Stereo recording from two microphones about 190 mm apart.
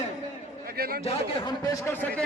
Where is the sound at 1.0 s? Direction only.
25° left (ahead or behind).